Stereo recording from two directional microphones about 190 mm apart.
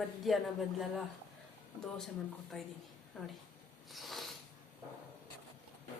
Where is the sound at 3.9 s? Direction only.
Centre (ahead or behind).